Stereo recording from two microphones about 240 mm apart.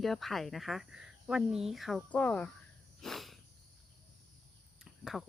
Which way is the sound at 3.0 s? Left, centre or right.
Centre.